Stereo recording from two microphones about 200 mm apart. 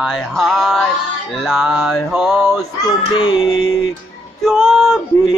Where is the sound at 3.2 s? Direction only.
25° left (ahead or behind).